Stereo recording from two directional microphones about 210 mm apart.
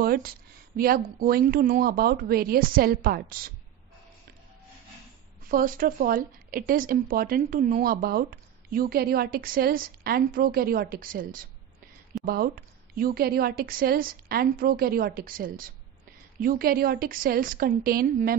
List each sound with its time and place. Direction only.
0.0 s speech: 45° right (ahead or behind)
5.5 s speech: 40° right (ahead or behind)